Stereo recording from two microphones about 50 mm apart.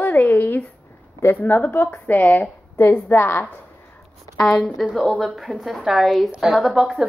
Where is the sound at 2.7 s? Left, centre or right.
Left.